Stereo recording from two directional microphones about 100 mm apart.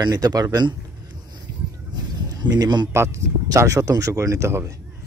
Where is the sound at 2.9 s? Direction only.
30° right (ahead or behind).